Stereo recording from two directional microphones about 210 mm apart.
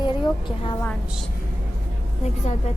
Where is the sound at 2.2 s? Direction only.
30° left (ahead or behind).